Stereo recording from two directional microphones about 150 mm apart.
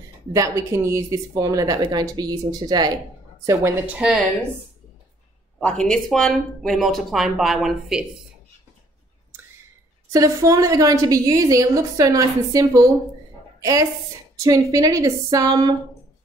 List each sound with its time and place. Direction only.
0.3 s a woman's voice: 20° right (ahead or behind)
5.9 s speech: 5° left (ahead or behind)
10.1 s a woman's voice: 20° right (ahead or behind)